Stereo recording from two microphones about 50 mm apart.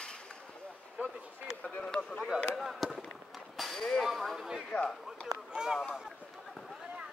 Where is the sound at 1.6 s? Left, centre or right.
Left.